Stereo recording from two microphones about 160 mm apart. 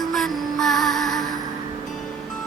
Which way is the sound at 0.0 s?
Centre (ahead or behind).